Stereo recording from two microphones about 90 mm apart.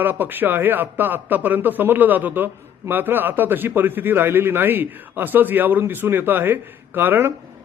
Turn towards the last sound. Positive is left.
turn(degrees=-25)  # may be behind; listen again after turning